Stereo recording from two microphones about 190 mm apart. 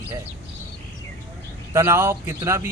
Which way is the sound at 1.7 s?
15° right (ahead or behind).